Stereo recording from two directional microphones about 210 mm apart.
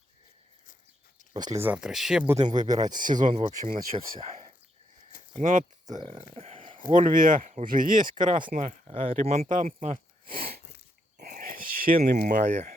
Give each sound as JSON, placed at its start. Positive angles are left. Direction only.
{"t": 1.3, "sound": "speech", "side_deg": -25}
{"t": 1.6, "sound": "speech", "side_deg": -5}
{"t": 2.2, "sound": "speech", "side_deg": -15}
{"t": 2.6, "sound": "speech", "side_deg": -35}
{"t": 11.2, "sound": "a sound", "side_deg": -45}